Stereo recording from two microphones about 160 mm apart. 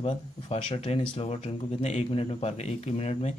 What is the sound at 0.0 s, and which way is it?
Speech, 35° left (ahead or behind).